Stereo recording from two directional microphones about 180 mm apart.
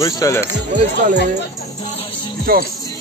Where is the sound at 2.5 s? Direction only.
55° right (ahead or behind).